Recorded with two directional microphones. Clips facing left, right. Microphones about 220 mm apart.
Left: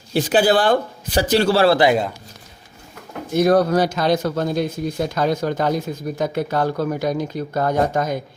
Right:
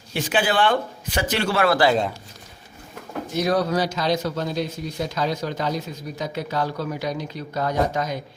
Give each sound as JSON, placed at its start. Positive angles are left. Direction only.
{"t": 0.1, "sound": "a man's voice", "side_deg": 35}
{"t": 3.3, "sound": "speech", "side_deg": 50}